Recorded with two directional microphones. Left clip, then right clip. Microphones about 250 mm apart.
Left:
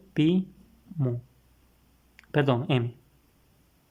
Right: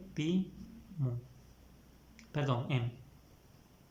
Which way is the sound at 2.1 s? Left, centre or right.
Left.